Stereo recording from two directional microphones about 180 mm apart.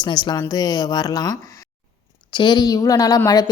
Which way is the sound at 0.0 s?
25° left (ahead or behind).